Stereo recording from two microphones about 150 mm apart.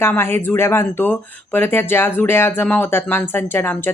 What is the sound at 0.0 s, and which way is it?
Speech, 15° left (ahead or behind).